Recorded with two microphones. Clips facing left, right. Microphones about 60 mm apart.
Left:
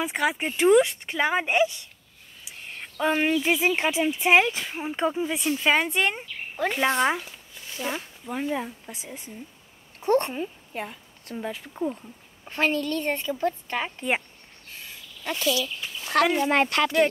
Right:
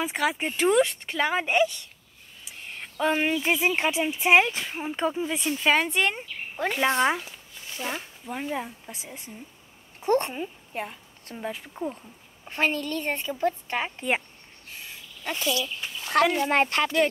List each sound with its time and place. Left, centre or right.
0.0 s a woman's voice: centre
4.9 s speech: centre
5.2 s speech: centre
12.4 s a woman's voice: centre
13.0 s a woman's voice: centre
13.4 s a woman's voice: right
15.2 s a woman's voice: right